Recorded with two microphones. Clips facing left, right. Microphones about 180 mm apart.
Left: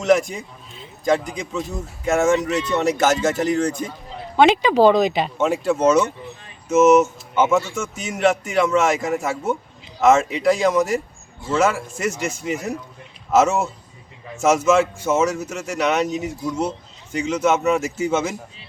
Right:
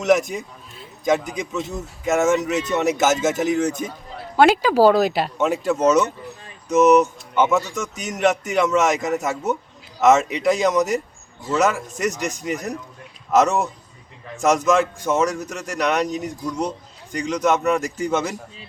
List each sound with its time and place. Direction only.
0.0 s a man's voice: centre (ahead or behind)
12.1 s speech: 15° right (ahead or behind)
12.4 s a man's voice: centre (ahead or behind)